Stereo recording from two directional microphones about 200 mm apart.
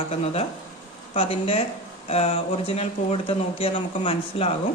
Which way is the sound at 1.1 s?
30° left (ahead or behind).